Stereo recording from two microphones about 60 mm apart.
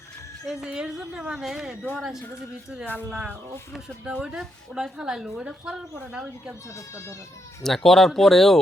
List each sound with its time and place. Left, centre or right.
0.6 s a woman's voice: centre
2.8 s speech: left
3.7 s a woman's voice: centre
6.7 s speech: left
7.6 s speech: centre